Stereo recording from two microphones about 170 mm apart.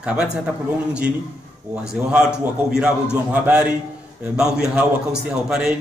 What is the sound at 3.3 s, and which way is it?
A man's voice, 10° right (ahead or behind).